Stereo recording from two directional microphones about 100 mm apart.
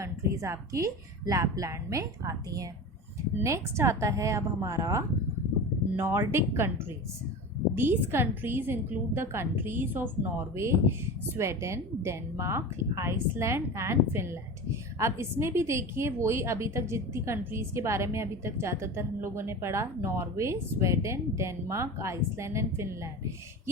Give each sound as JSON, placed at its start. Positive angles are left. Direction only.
{"t": 0.0, "sound": "a woman's voice", "side_deg": -30}
{"t": 7.8, "sound": "a woman's voice", "side_deg": -20}